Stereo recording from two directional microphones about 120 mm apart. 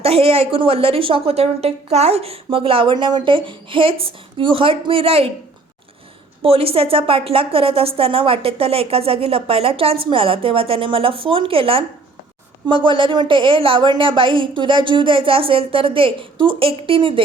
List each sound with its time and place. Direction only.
0.0 s speech: 55° right (ahead or behind)
6.4 s speech: 50° right (ahead or behind)